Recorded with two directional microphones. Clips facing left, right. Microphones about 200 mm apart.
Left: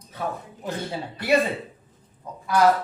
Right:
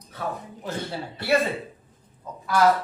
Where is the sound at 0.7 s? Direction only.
15° left (ahead or behind).